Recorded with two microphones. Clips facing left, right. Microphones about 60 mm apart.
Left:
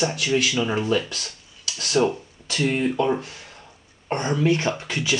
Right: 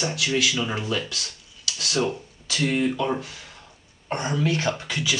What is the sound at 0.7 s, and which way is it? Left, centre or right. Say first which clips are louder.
Speech: left 5 dB; left.